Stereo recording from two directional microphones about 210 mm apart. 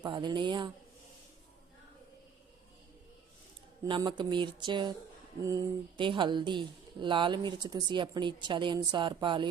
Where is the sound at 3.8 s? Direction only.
20° right (ahead or behind).